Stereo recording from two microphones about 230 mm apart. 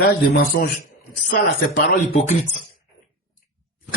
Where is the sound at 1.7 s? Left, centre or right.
Left.